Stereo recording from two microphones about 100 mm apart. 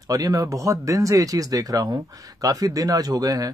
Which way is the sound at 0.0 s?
40° right (ahead or behind).